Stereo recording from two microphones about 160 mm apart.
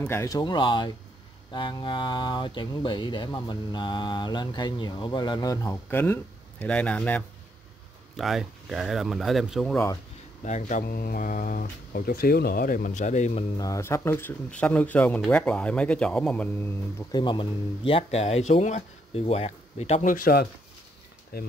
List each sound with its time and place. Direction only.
0.0 s speech: 15° left (ahead or behind)
8.2 s speech: centre (ahead or behind)
10.4 s speech: 50° left (ahead or behind)
13.6 s speech: 20° left (ahead or behind)
17.1 s speech: 30° left (ahead or behind); by 21.5 s 70° left (ahead or behind)